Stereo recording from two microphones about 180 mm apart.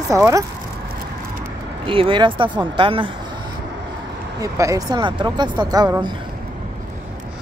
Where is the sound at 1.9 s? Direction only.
30° right (ahead or behind).